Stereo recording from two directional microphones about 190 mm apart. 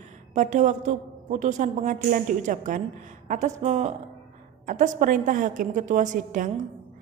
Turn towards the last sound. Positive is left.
turn(degrees=-40)  # may be behind; listen again after turning